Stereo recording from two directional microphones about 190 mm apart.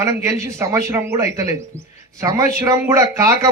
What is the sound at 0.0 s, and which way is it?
A man's voice, 15° right (ahead or behind).